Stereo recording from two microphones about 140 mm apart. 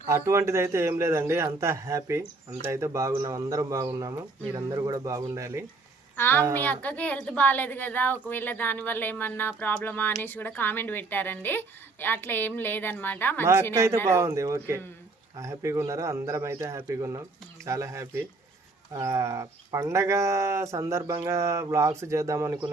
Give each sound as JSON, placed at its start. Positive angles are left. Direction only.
{"t": 0.1, "sound": "speech", "side_deg": -20}
{"t": 6.1, "sound": "a woman's voice", "side_deg": 15}
{"t": 13.4, "sound": "speech", "side_deg": -20}